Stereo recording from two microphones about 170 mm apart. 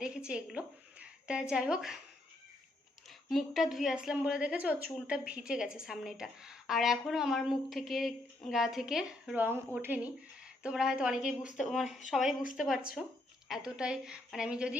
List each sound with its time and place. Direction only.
0.0 s speech: 5° right (ahead or behind)
3.2 s a woman's voice: centre (ahead or behind)